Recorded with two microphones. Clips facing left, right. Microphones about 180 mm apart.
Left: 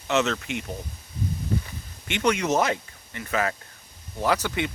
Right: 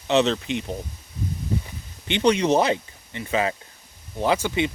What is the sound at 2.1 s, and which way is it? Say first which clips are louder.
Speech: right 4 dB; 30° right (ahead or behind).